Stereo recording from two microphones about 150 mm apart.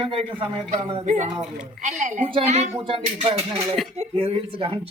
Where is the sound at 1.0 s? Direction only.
60° right (ahead or behind).